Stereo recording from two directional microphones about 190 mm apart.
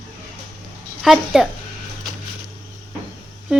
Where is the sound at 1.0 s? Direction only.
Centre (ahead or behind).